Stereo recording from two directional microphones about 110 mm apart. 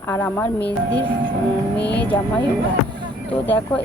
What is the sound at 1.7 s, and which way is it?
Vehicle, 10° left (ahead or behind).